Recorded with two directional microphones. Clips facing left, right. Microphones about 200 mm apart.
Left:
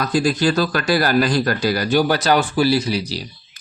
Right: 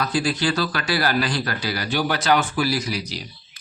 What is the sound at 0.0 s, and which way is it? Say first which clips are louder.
A man's voice: left 5 dB; 45° left (ahead or behind).